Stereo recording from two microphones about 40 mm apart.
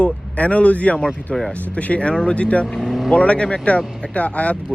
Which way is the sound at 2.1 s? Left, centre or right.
Centre.